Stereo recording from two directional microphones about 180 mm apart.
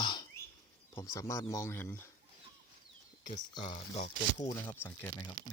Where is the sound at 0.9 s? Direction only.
20° left (ahead or behind).